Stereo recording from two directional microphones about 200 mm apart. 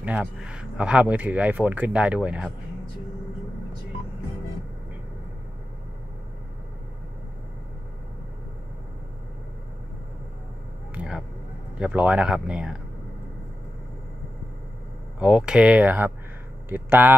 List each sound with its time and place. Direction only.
0.0 s speech: 5° right (ahead or behind)
11.0 s vehicle: 5° right (ahead or behind)
11.8 s speech: 5° right (ahead or behind)
15.1 s speech: 5° right (ahead or behind)